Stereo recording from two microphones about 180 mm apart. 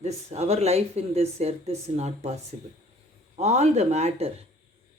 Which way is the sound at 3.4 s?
40° right (ahead or behind).